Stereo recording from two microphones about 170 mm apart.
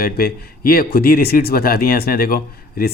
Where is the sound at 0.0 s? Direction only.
60° left (ahead or behind).